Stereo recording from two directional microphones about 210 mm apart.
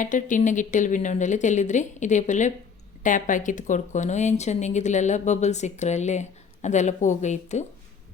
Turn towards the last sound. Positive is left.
turn(degrees=35)  # may be behind; listen again after turning